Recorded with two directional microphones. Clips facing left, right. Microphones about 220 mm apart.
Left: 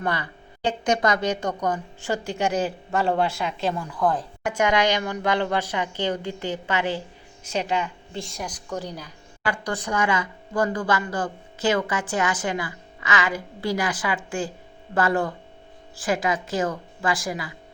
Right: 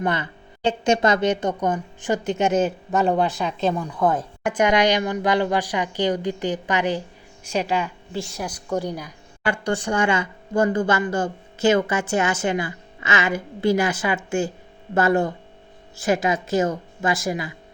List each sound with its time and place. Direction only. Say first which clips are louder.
0.0 s a woman's voice: right 3 dB; 20° right (ahead or behind)
9.5 s speech: right 4 dB; 25° right (ahead or behind)